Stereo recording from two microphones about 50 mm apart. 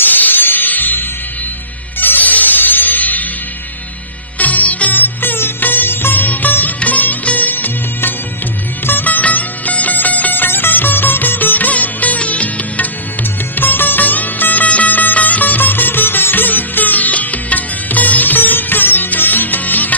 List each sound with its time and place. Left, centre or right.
0.0 s music: left
4.4 s music: left
13.6 s music: left